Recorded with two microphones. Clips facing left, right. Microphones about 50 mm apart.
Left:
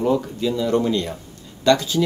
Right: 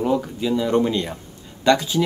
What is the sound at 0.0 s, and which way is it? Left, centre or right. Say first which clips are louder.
Speech: left 1 dB; centre.